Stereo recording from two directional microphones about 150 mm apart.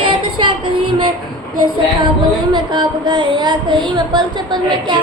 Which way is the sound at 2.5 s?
30° right (ahead or behind).